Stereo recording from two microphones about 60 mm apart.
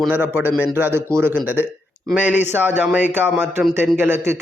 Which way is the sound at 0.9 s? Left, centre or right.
Right.